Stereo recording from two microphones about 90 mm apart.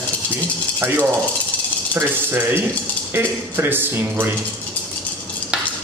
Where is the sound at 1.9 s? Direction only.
25° right (ahead or behind).